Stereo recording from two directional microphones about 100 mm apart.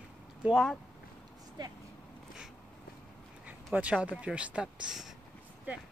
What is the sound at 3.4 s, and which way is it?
Speech, 15° right (ahead or behind).